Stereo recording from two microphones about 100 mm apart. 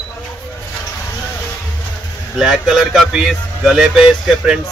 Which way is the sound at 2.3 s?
5° right (ahead or behind).